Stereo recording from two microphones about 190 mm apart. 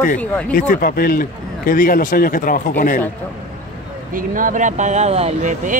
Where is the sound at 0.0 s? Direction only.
45° left (ahead or behind).